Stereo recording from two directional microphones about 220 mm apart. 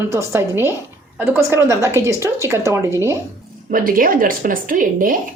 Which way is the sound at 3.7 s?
40° right (ahead or behind).